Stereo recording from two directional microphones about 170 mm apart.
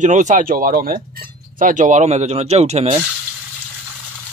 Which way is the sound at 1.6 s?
50° right (ahead or behind).